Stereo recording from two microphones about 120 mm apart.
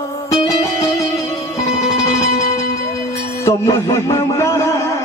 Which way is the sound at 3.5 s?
25° left (ahead or behind).